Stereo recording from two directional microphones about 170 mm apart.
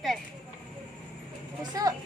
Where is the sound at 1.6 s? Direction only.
25° right (ahead or behind).